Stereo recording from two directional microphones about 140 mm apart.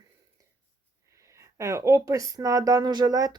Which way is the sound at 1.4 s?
20° right (ahead or behind).